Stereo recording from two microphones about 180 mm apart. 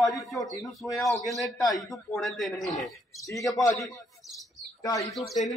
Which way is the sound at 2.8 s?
20° left (ahead or behind).